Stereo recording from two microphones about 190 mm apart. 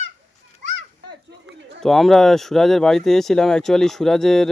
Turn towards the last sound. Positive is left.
turn(degrees=0)  # may be behind; listen again after turning